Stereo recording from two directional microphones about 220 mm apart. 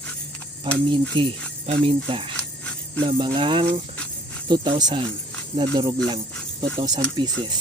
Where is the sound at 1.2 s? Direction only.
25° right (ahead or behind).